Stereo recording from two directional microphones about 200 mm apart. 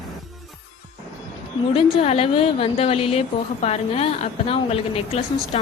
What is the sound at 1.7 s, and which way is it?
A woman's voice, 30° left (ahead or behind).